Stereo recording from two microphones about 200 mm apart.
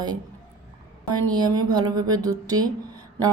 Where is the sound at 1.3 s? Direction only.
20° right (ahead or behind).